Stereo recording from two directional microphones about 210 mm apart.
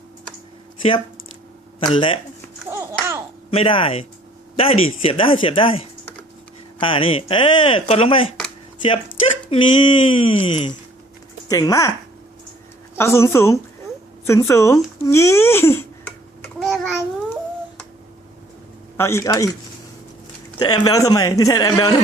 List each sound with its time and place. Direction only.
0.8 s speech: 25° left (ahead or behind)
2.6 s a sound: 15° right (ahead or behind)
3.5 s speech: 25° left (ahead or behind)
13.0 s a man's voice: 10° left (ahead or behind)
16.6 s babbling: centre (ahead or behind)
18.9 s a man's voice: 10° left (ahead or behind)
20.6 s a man's voice: 20° left (ahead or behind)